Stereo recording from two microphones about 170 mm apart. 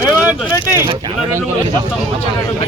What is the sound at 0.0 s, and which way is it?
Vehicle, 10° right (ahead or behind).